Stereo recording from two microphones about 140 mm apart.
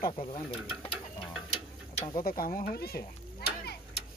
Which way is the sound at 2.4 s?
90° left.